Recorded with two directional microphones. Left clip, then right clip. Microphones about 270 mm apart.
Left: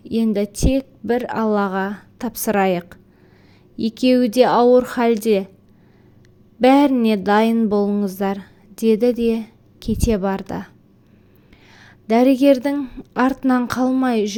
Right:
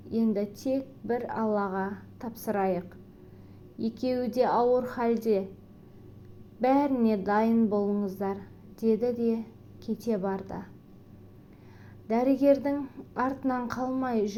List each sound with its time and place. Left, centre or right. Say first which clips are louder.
0.1 s a woman's voice: left 9 dB; left
6.6 s a woman's voice: left 11 dB; left
11.8 s a woman's voice: left 12 dB; left